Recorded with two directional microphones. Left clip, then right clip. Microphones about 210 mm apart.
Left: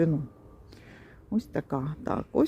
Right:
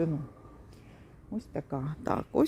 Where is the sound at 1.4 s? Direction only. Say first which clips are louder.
Left 5 dB; 20° left (ahead or behind).